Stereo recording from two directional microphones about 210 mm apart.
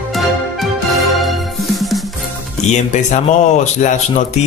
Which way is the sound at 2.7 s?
35° left (ahead or behind).